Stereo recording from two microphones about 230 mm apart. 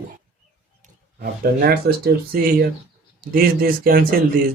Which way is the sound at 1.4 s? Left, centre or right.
Right.